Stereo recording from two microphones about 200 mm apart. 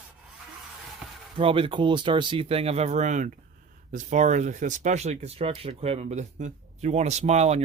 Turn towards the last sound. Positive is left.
turn(degrees=-35)  # may be behind; listen again after turning